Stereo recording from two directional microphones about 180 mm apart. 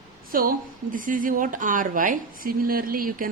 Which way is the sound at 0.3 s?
50° right (ahead or behind).